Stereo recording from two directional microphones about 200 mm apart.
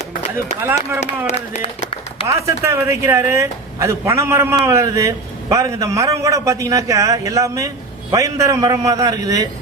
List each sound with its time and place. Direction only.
0.3 s a man's voice: 10° right (ahead or behind)
1.4 s a sound: 30° left (ahead or behind)
2.2 s a man's voice: 15° right (ahead or behind)